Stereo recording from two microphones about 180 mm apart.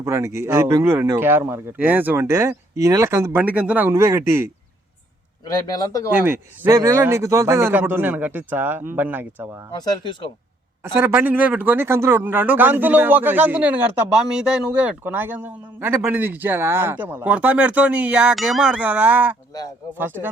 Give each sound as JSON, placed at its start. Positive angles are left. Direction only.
{"t": 0.0, "sound": "a man's voice", "side_deg": -15}
{"t": 5.6, "sound": "speech", "side_deg": 20}
{"t": 6.1, "sound": "a man's voice", "side_deg": -10}
{"t": 9.7, "sound": "speech", "side_deg": 20}
{"t": 10.9, "sound": "a man's voice", "side_deg": -10}